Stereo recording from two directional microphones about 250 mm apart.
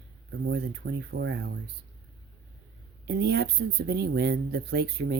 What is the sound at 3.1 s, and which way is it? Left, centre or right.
Speech, right.